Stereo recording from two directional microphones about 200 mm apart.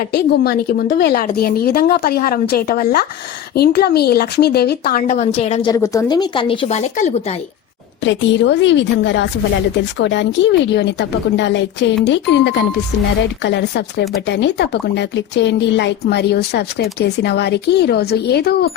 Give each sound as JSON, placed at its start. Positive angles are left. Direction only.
{"t": 0.1, "sound": "a woman's voice", "side_deg": 50}
{"t": 5.7, "sound": "speech", "side_deg": 15}
{"t": 8.0, "sound": "speech", "side_deg": 65}